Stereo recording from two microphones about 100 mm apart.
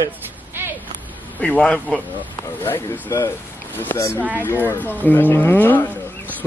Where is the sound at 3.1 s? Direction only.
30° left (ahead or behind).